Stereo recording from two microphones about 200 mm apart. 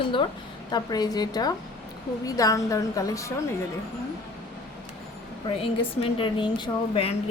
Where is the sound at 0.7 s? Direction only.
20° left (ahead or behind).